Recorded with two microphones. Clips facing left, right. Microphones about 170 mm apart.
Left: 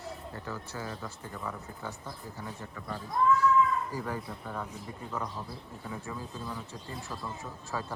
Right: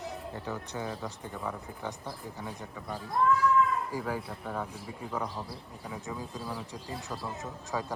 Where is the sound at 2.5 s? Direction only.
10° right (ahead or behind).